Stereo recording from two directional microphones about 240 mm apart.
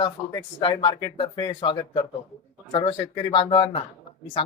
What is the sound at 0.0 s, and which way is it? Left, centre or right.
Speech, centre.